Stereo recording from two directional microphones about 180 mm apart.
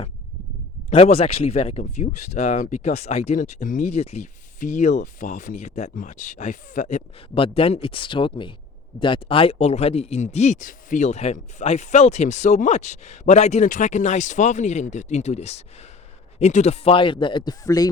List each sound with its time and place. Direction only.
0.9 s speech: 35° left (ahead or behind)